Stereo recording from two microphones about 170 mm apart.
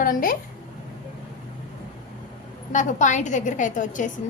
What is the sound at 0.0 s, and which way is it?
Speech, 55° left (ahead or behind).